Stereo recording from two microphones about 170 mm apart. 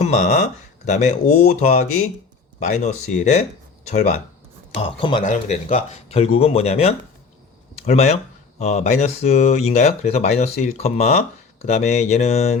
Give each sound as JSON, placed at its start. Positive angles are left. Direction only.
{"t": 0.0, "sound": "speech", "side_deg": 45}
{"t": 5.2, "sound": "speech", "side_deg": 45}
{"t": 5.6, "sound": "speech", "side_deg": 35}